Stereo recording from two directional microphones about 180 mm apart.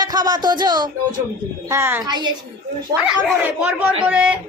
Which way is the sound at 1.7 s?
15° right (ahead or behind).